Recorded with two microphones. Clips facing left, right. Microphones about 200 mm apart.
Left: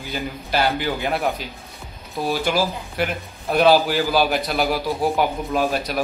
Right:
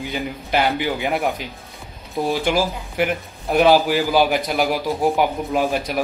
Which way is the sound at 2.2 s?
15° right (ahead or behind).